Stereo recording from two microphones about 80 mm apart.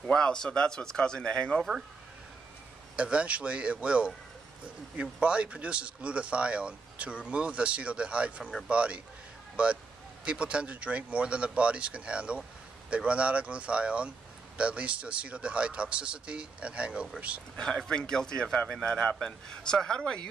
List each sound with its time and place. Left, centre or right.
0.0 s speech: centre
1.6 s speech: centre
3.0 s speech: centre
17.6 s speech: centre